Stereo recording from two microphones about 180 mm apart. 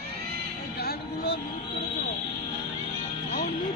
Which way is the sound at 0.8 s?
60° left (ahead or behind).